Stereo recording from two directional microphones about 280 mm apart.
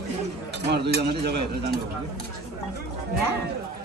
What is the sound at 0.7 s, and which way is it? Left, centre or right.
Speech, right.